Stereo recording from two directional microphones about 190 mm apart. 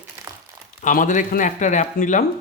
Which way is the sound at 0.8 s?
45° left (ahead or behind).